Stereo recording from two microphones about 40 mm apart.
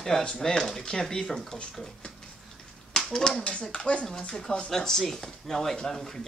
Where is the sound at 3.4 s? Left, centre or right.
Left.